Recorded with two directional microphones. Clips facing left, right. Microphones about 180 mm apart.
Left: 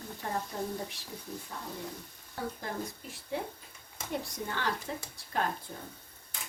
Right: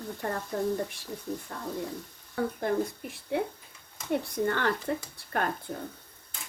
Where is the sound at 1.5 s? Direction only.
65° right (ahead or behind).